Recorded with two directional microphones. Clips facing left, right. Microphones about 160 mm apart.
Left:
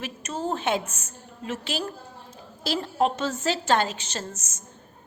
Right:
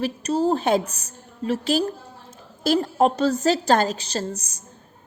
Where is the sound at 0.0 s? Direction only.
35° right (ahead or behind).